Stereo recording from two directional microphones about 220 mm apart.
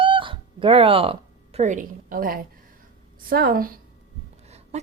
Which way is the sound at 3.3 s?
45° right (ahead or behind).